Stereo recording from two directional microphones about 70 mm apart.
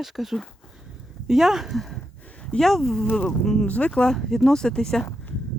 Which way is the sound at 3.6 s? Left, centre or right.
Centre.